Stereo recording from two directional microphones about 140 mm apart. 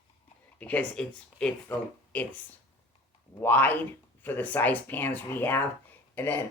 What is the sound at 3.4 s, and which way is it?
Speech, 10° left (ahead or behind).